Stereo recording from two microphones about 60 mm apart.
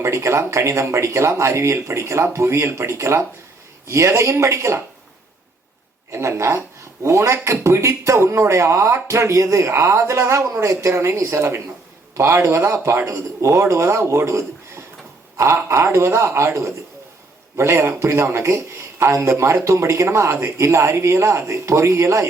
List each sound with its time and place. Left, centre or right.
0.0 s a man's voice: right
6.1 s a man's voice: right